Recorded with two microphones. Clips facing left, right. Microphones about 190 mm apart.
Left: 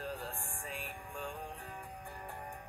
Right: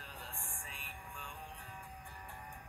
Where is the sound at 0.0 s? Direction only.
45° left (ahead or behind).